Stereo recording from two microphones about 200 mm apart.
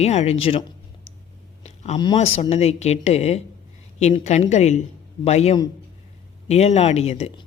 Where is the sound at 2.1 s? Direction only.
30° left (ahead or behind).